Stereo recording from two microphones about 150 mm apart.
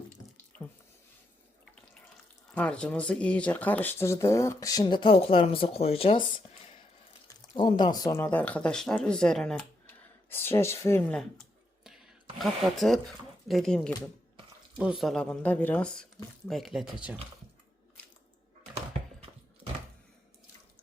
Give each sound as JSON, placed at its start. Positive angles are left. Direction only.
{"t": 2.6, "sound": "speech", "side_deg": 5}
{"t": 7.3, "sound": "speech", "side_deg": 30}
{"t": 12.4, "sound": "speech", "side_deg": 0}